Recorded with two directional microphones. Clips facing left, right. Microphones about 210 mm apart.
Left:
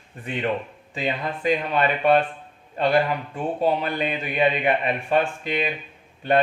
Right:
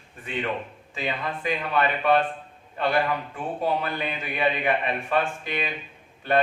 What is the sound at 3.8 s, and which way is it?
A man's voice, 20° left (ahead or behind).